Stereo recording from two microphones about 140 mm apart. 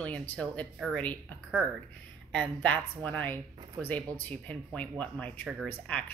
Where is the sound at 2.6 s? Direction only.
10° left (ahead or behind).